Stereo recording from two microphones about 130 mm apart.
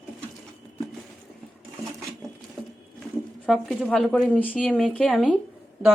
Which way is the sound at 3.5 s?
Centre (ahead or behind).